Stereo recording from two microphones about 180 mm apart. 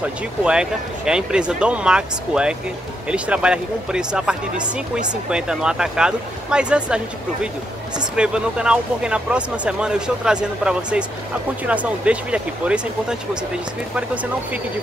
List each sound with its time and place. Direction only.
0.0 s speech: 5° right (ahead or behind)
8.2 s speech: 5° right (ahead or behind)